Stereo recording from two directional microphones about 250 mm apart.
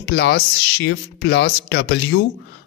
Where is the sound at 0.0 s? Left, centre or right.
Left.